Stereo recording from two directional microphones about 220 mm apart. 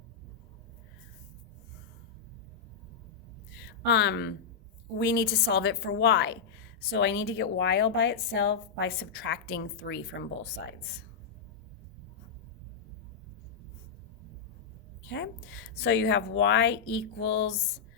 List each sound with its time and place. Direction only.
3.5 s a sound: 50° left (ahead or behind)
4.9 s a woman's voice: 45° left (ahead or behind)
15.0 s a woman's voice: 55° left (ahead or behind)